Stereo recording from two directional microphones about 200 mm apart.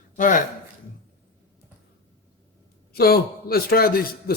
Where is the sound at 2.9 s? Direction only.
50° left (ahead or behind).